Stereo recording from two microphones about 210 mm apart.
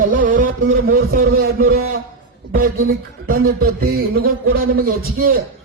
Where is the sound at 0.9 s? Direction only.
45° right (ahead or behind).